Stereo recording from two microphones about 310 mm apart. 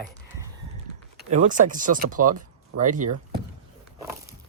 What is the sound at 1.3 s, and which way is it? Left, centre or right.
Speech, right.